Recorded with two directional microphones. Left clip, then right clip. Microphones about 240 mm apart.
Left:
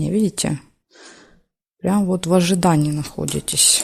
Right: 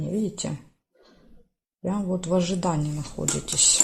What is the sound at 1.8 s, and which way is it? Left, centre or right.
Speech, left.